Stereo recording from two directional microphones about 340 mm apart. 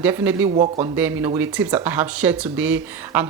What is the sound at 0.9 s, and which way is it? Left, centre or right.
A woman's voice, centre.